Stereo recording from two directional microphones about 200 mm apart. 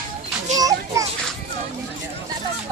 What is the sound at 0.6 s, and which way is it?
Children playing, 15° right (ahead or behind).